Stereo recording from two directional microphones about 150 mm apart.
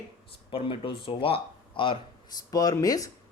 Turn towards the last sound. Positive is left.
turn(degrees=25)  # may be behind; listen again after turning